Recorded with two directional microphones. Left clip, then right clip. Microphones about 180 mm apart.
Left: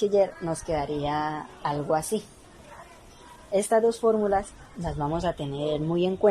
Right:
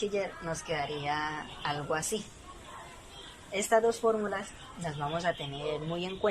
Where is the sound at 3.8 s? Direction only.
40° left (ahead or behind).